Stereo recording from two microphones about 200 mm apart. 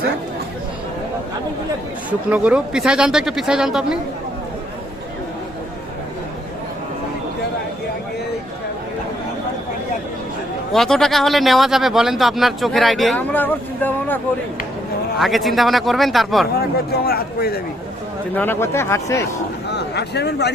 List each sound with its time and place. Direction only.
2.0 s speech: 5° right (ahead or behind)
10.7 s speech: centre (ahead or behind)
15.2 s speech: centre (ahead or behind)
16.6 s speech: 50° left (ahead or behind)
18.3 s speech: 10° left (ahead or behind)
19.7 s speech: 55° left (ahead or behind)